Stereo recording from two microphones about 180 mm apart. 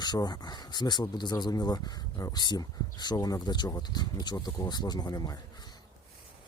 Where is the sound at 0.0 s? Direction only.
25° left (ahead or behind).